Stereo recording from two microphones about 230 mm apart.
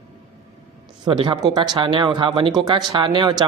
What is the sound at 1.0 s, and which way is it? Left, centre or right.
Speech, centre.